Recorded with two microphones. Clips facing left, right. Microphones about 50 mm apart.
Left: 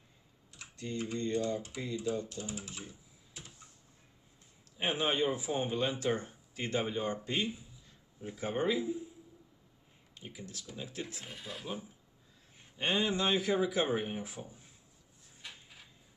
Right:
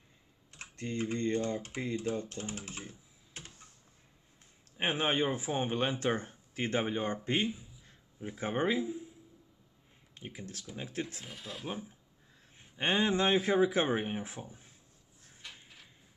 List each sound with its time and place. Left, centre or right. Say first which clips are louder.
0.5 s speech: right 2 dB; right
4.7 s speech: right 1 dB; right
8.2 s speech: right 1 dB; right
10.1 s speech: right 2 dB; right
11.2 s speech: even; centre
12.7 s speech: right 2 dB; right
15.4 s a sound: even; centre